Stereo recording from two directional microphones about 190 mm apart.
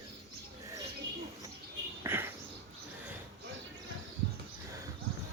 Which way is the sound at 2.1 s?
10° right (ahead or behind).